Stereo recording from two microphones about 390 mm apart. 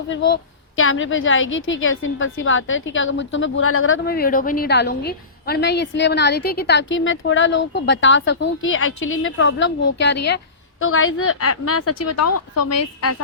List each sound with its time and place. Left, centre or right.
0.8 s a woman's voice: left